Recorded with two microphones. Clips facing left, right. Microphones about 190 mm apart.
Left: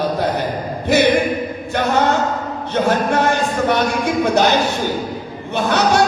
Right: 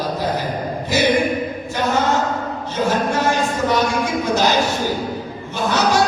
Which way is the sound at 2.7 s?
60° left (ahead or behind).